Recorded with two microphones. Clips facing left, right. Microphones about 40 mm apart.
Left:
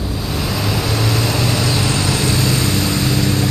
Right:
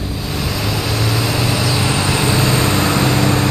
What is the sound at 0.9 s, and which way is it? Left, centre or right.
Vehicle, centre.